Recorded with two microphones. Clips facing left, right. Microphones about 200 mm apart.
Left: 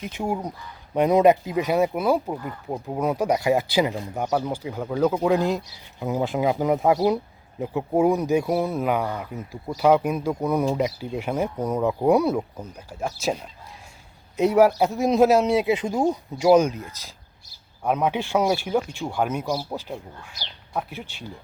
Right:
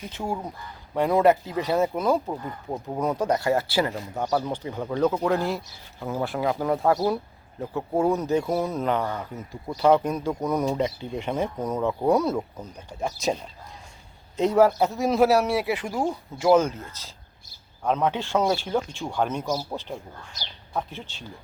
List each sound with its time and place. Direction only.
0.1 s speech: 15° left (ahead or behind)